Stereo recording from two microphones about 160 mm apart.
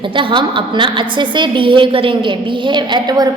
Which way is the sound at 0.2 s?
30° right (ahead or behind).